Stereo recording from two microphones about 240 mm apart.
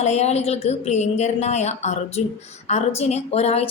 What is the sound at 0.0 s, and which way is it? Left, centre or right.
A woman's voice, left.